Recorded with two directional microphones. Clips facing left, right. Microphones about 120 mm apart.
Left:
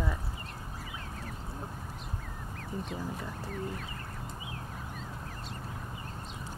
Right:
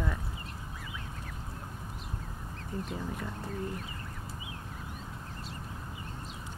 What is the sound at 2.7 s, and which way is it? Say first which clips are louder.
Speech: right 1 dB; 10° left (ahead or behind).